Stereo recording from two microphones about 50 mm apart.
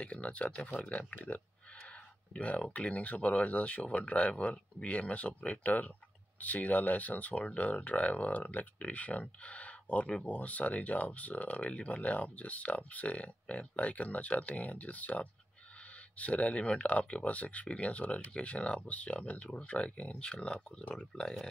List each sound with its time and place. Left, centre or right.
0.0 s speech: left